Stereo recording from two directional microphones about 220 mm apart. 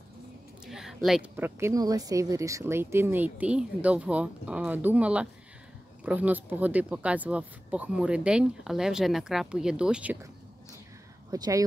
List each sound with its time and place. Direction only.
0.7 s a woman's voice: centre (ahead or behind)
11.2 s speech: 15° right (ahead or behind)